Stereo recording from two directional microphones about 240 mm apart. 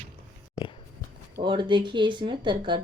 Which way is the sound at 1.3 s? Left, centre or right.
Centre.